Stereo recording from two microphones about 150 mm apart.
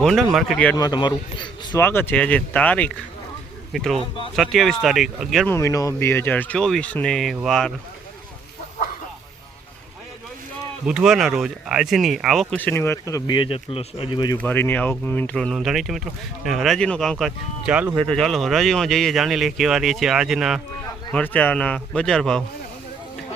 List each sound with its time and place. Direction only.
0.0 s speech: centre (ahead or behind)
0.8 s a man's voice: 30° left (ahead or behind)
1.8 s speech: 15° left (ahead or behind)
5.5 s speech: 20° left (ahead or behind); by 7.7 s centre (ahead or behind)
10.8 s speech: 5° right (ahead or behind)
12.5 s speech: 10° left (ahead or behind); by 14.3 s 30° left (ahead or behind)
14.3 s speech: 15° left (ahead or behind)
21.1 s speech: 10° left (ahead or behind)